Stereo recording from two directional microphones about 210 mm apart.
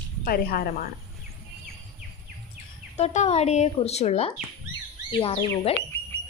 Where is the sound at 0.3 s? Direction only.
45° left (ahead or behind).